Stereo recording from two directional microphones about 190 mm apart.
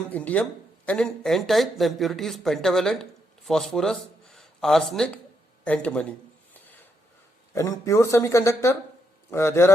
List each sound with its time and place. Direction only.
0.1 s speech: 10° left (ahead or behind)